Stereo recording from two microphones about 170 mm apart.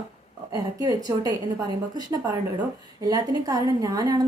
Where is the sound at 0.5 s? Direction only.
20° right (ahead or behind).